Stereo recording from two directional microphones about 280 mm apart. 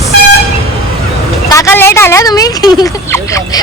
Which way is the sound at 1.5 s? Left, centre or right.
Centre.